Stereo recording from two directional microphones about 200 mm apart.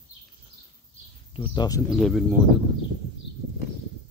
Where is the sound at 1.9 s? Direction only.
Centre (ahead or behind).